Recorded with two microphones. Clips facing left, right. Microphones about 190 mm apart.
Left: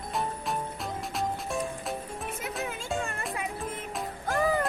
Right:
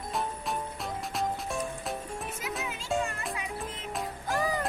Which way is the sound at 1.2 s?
Centre (ahead or behind).